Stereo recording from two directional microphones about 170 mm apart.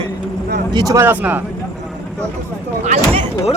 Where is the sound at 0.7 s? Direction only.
20° right (ahead or behind).